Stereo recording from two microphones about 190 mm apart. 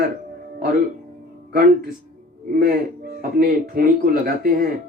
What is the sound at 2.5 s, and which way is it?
A man's voice, 50° right (ahead or behind).